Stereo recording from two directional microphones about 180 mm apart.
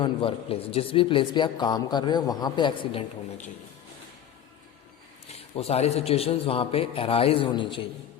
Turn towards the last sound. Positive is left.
turn(degrees=25)  # may be behind; listen again after turning